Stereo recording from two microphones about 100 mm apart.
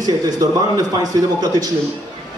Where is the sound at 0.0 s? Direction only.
40° right (ahead or behind).